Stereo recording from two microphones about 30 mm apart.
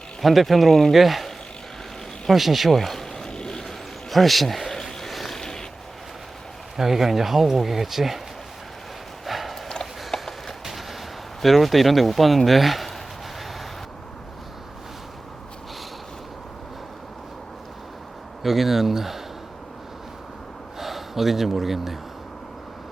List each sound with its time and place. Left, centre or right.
0.2 s speech: centre
2.3 s speech: centre
3.2 s vehicle: left
4.1 s a sound: centre
5.4 s a sound: centre
6.7 s speech: centre
9.2 s horse: centre
10.1 s a sound: centre
11.4 s speech: centre
18.4 s speech: centre
20.7 s speech: centre